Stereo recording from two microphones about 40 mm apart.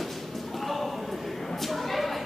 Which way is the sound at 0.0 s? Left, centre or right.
Centre.